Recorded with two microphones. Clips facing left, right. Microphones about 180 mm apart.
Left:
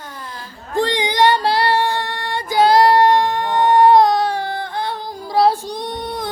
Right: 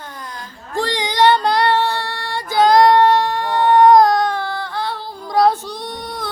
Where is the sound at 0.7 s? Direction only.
20° left (ahead or behind).